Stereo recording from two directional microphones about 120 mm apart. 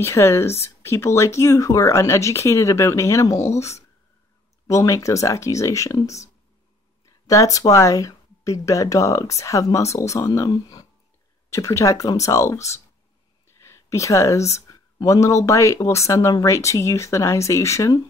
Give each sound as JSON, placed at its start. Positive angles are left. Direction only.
{"t": 0.0, "sound": "speech", "side_deg": 25}